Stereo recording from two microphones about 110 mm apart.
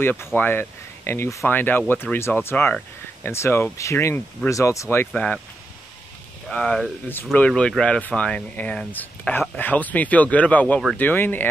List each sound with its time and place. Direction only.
0.0 s speech: 20° left (ahead or behind)
5.1 s speech: 10° left (ahead or behind)
6.5 s speech: 10° left (ahead or behind)